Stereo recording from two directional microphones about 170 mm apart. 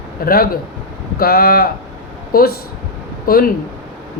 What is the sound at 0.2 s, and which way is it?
Speech, 60° left (ahead or behind).